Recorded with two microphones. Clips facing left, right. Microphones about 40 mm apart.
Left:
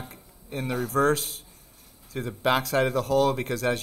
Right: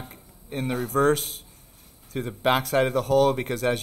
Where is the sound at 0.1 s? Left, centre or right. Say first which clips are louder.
Right 2 dB; right.